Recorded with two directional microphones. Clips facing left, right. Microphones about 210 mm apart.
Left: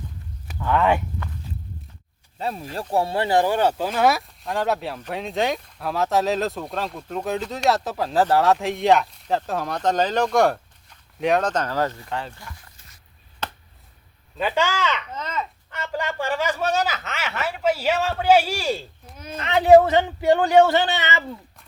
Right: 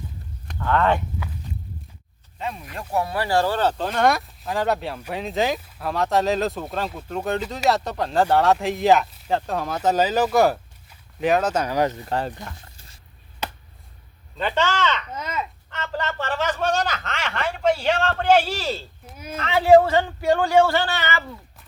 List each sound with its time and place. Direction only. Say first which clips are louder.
0.4 s speech: left 1 dB; 10° left (ahead or behind)
2.4 s speech: left 3 dB; 35° left (ahead or behind); by 12.0 s 15° right (ahead or behind)
12.0 s speech: right 5 dB; 40° right (ahead or behind)
12.5 s a sound: right 3 dB; 30° right (ahead or behind)
13.4 s a sound: right 1 dB; 10° right (ahead or behind)
14.3 s speech: even; 10° left (ahead or behind)
15.1 s speech: even; 10° right (ahead or behind)
15.7 s a sound: even; 10° left (ahead or behind)
19.0 s speech: right 1 dB; 5° right (ahead or behind)
19.4 s a man's voice: left 1 dB; 20° left (ahead or behind)